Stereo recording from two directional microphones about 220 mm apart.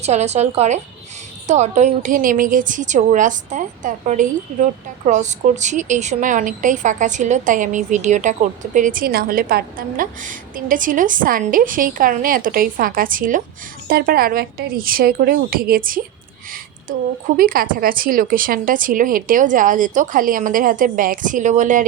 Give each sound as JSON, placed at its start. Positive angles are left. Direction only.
{"t": 0.0, "sound": "a woman's voice", "side_deg": -30}
{"t": 17.3, "sound": "a woman's voice", "side_deg": -40}